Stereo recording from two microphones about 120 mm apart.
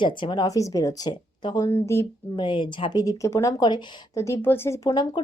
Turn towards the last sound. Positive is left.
turn(degrees=35)  # may be behind; listen again after turning